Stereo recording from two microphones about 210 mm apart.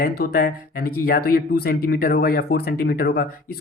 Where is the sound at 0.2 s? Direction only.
45° left (ahead or behind).